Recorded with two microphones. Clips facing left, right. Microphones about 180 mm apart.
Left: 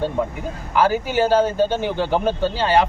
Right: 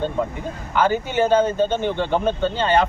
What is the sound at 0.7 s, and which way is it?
Speech, 5° left (ahead or behind).